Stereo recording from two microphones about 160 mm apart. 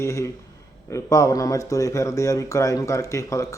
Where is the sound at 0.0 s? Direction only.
20° left (ahead or behind).